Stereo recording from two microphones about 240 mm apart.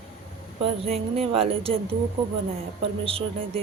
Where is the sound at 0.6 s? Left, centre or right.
Right.